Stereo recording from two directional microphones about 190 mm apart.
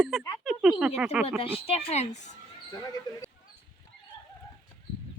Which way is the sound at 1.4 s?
30° left (ahead or behind).